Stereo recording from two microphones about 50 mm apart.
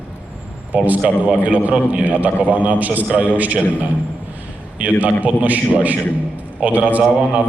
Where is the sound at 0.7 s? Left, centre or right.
Right.